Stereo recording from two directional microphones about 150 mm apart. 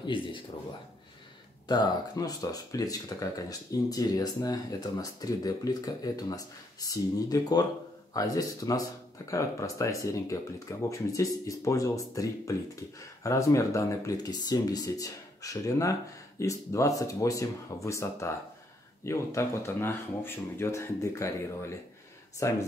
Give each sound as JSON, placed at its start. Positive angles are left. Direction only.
{"t": 0.0, "sound": "speech", "side_deg": 35}
{"t": 1.7, "sound": "speech", "side_deg": 25}